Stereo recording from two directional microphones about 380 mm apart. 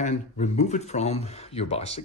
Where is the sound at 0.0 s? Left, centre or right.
Centre.